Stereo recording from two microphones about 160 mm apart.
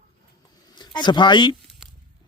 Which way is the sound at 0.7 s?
30° left (ahead or behind).